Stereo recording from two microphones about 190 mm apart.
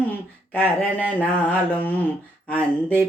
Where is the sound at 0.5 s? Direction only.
10° left (ahead or behind).